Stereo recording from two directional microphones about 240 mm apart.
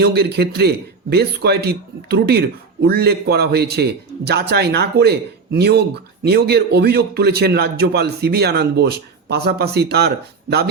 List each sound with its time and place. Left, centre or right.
0.0 s a man's voice: right